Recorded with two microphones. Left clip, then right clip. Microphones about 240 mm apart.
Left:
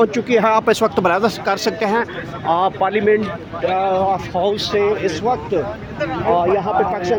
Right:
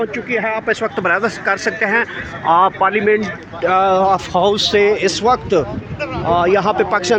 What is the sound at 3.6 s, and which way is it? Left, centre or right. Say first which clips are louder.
Speech: right 4 dB; right.